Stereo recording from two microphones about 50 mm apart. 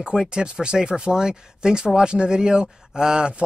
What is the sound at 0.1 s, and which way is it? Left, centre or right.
Speech, centre.